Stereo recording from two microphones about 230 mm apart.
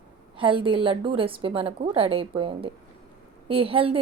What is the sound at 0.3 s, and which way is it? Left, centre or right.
A woman's voice, right.